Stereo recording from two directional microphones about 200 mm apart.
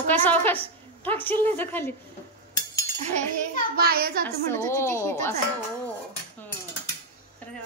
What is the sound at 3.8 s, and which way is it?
Speech, 50° right (ahead or behind).